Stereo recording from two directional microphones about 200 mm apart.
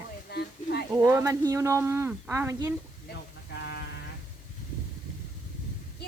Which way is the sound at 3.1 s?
60° left (ahead or behind).